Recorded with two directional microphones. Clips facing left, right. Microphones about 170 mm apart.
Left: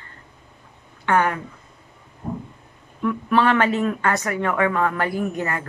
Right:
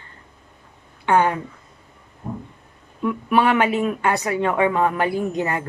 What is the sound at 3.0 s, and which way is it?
Speech, 15° right (ahead or behind).